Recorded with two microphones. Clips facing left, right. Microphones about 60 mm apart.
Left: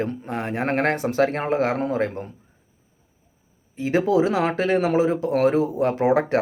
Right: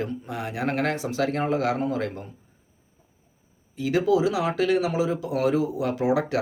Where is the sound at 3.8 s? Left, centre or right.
Left.